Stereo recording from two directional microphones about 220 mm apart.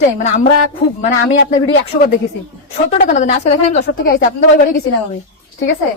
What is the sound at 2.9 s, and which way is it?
A woman's voice, 35° left (ahead or behind).